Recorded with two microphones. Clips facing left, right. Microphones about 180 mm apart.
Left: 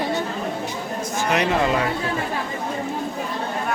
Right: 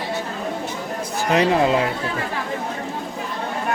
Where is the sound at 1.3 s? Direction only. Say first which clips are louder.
Right 4 dB; 30° right (ahead or behind).